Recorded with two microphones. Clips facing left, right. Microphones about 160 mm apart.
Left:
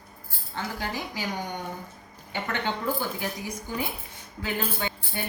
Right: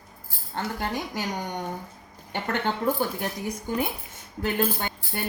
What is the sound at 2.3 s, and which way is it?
Speech, 50° right (ahead or behind).